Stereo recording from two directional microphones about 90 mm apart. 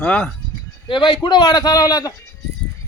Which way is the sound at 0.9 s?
65° left (ahead or behind).